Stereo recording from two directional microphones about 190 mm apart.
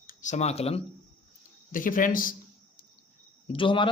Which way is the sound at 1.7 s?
45° left (ahead or behind).